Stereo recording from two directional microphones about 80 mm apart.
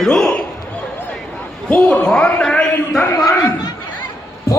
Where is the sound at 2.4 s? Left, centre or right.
Centre.